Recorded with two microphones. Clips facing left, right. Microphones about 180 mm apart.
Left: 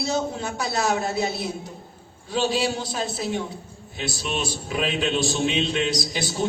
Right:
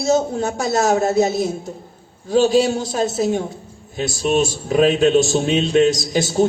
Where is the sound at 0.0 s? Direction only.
45° right (ahead or behind).